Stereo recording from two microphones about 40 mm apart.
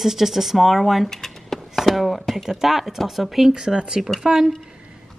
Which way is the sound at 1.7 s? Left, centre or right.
Centre.